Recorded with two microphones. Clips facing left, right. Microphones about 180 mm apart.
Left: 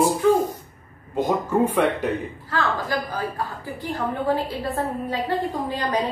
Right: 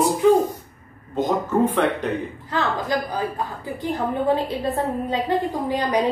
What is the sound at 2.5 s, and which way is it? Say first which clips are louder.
Speech: right 1 dB; 20° right (ahead or behind).